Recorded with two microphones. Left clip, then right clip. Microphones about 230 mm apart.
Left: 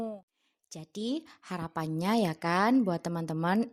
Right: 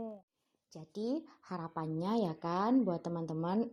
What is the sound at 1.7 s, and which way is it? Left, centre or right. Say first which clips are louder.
Speech: left 6 dB; left.